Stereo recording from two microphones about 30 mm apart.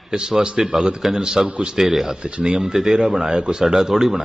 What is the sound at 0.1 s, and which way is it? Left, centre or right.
Speech, right.